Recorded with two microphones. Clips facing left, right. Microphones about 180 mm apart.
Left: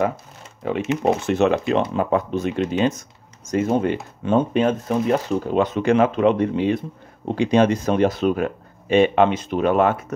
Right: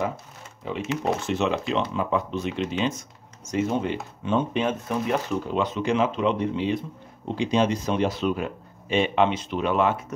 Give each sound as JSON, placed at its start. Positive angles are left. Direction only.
{"t": 0.7, "sound": "speech", "side_deg": 60}
{"t": 5.6, "sound": "speech", "side_deg": 55}